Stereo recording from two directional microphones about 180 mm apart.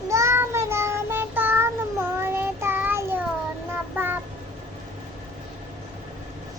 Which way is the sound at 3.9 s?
10° right (ahead or behind).